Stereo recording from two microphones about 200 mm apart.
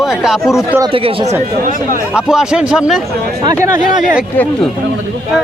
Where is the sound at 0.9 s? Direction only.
25° right (ahead or behind).